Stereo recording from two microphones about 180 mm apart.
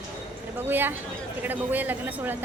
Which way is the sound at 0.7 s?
10° right (ahead or behind).